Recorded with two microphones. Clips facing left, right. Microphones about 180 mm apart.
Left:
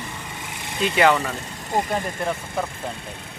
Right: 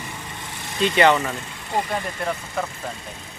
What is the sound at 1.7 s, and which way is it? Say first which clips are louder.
Speech: left 1 dB; 45° left (ahead or behind).